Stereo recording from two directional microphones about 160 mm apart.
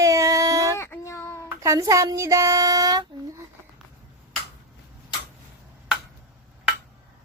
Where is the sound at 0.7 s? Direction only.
15° left (ahead or behind).